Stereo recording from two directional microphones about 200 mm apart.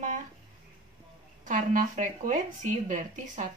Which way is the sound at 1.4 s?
40° right (ahead or behind).